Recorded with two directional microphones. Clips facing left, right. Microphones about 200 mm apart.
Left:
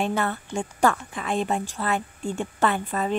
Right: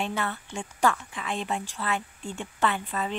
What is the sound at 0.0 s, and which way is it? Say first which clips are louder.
Speech: left 5 dB; 45° left (ahead or behind).